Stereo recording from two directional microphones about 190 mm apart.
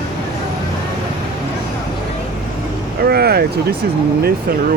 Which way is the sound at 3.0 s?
55° right (ahead or behind).